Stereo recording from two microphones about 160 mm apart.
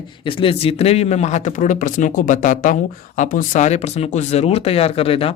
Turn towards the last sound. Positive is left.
turn(degrees=35)  # may be behind; listen again after turning